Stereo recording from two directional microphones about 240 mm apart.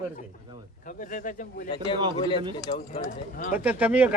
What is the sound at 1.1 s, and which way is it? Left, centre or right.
Speech, left.